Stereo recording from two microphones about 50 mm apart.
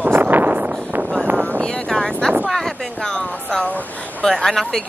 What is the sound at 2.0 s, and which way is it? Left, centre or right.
Speech, centre.